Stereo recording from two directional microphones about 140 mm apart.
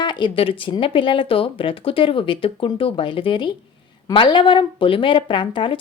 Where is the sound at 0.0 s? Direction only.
35° left (ahead or behind).